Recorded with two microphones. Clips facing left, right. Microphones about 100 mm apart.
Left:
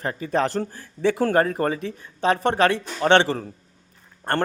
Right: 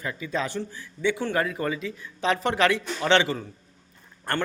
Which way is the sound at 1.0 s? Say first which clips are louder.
Left 6 dB; 40° left (ahead or behind).